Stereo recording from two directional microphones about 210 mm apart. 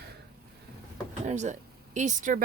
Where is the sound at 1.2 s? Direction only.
35° right (ahead or behind).